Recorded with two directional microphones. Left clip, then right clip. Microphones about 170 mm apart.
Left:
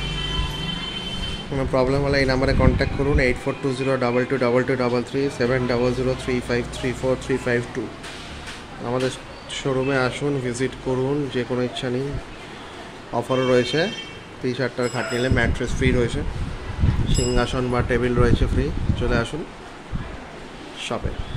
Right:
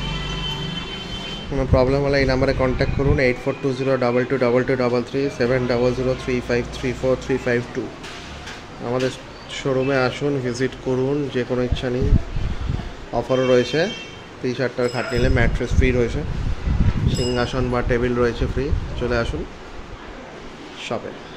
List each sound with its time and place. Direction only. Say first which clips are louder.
1.5 s speech: right 2 dB; centre (ahead or behind)
9.5 s speech: right 2 dB; centre (ahead or behind)
13.1 s speech: right 2 dB; centre (ahead or behind)
17.3 s speech: even; 5° left (ahead or behind)